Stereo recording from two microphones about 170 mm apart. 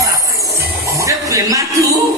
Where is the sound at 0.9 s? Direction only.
20° right (ahead or behind).